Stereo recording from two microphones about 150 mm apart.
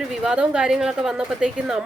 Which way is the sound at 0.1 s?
5° right (ahead or behind).